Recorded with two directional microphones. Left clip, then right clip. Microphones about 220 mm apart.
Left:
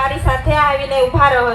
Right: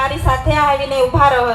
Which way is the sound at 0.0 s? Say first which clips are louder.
Right 1 dB; 40° right (ahead or behind).